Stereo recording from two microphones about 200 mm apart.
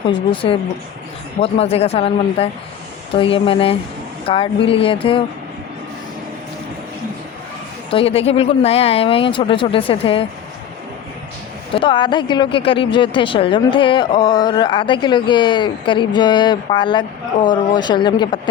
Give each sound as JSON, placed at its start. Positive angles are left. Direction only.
{"t": 0.1, "sound": "speech", "side_deg": 25}
{"t": 7.9, "sound": "speech", "side_deg": 30}
{"t": 11.7, "sound": "speech", "side_deg": 25}